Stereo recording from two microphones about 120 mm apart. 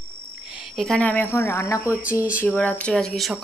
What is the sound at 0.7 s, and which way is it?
Speech, 5° left (ahead or behind).